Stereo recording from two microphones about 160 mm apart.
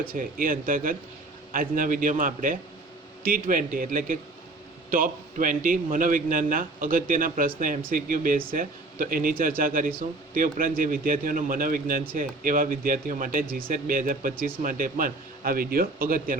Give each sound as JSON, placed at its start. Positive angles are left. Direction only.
{"t": 0.0, "sound": "a man's voice", "side_deg": -60}